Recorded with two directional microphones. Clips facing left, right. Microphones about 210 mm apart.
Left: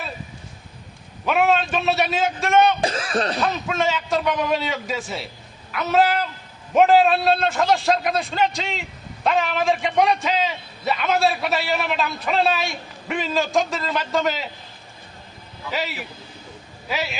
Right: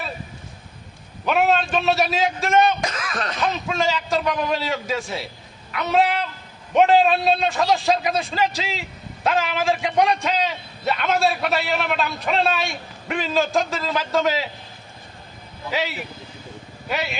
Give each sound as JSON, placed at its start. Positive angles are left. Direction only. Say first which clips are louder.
{"t": 1.2, "sound": "a man's voice", "louder": "even", "side_deg": 0}
{"t": 2.8, "sound": "a sound", "louder": "left 5 dB", "side_deg": 30}
{"t": 3.4, "sound": "a man's voice", "louder": "even", "side_deg": 0}
{"t": 15.7, "sound": "a man's voice", "louder": "right 2 dB", "side_deg": 0}